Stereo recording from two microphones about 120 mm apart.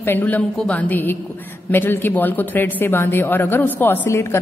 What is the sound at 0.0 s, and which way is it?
A woman's voice, 15° left (ahead or behind).